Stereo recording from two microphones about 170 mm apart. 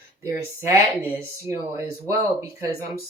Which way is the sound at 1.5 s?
15° right (ahead or behind).